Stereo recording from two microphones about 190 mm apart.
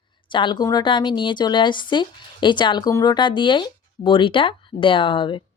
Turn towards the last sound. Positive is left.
turn(degrees=25)  # may be behind; listen again after turning